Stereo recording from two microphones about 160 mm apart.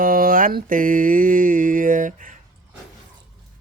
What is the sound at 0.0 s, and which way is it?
Mantra, 60° right (ahead or behind).